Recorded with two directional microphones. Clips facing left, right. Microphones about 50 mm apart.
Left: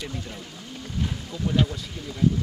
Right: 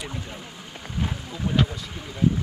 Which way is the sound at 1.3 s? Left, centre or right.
Centre.